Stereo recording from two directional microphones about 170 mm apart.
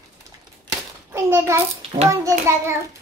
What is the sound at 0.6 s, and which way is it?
Hands, 15° right (ahead or behind).